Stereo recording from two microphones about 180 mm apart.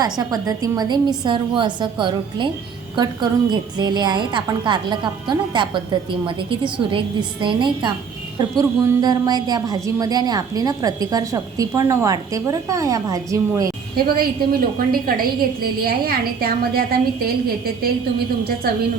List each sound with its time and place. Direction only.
0.0 s a woman's voice: 20° right (ahead or behind)
13.9 s a woman's voice: 55° right (ahead or behind)